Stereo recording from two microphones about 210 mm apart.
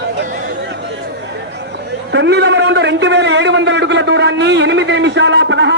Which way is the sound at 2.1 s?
55° right (ahead or behind).